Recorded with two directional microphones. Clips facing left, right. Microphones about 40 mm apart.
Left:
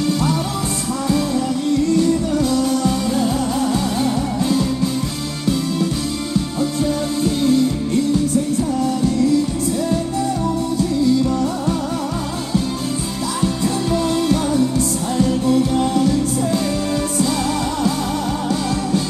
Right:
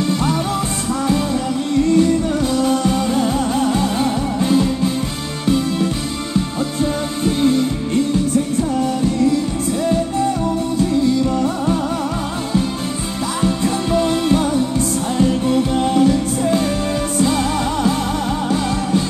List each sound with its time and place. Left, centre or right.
0.2 s music: right
2.5 s music: right
7.2 s music: right
15.4 s music: right